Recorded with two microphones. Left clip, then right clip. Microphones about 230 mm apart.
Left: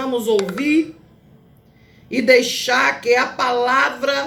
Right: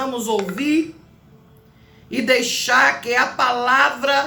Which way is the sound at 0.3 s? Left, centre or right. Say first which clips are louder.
Left 3 dB; left.